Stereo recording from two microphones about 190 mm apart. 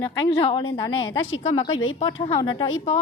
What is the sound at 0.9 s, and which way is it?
Speech, 85° left.